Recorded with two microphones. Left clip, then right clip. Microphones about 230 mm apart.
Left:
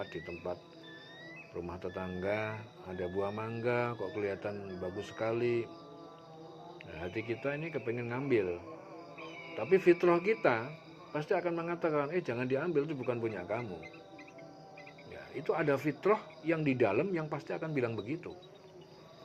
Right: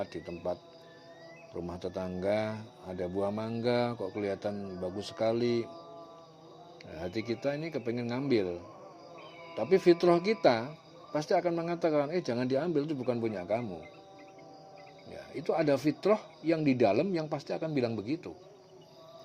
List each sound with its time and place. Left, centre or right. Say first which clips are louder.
0.0 s speech: right 4 dB; right
1.5 s speech: right 3 dB; right
6.9 s speech: right 3 dB; right
9.6 s speech: right 2 dB; right
15.4 s speech: right 3 dB; right